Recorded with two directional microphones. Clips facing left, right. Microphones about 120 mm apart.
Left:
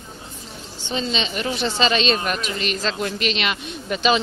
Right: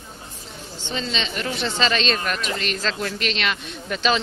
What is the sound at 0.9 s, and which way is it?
Speech, 15° left (ahead or behind).